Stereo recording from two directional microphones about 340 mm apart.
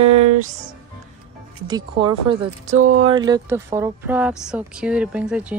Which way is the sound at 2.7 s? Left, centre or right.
Right.